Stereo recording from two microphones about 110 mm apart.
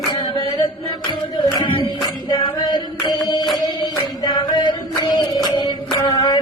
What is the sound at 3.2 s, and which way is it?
Music, 40° left (ahead or behind).